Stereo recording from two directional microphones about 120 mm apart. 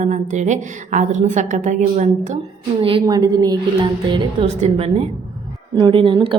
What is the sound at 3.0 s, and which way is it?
A woman's voice, 35° right (ahead or behind).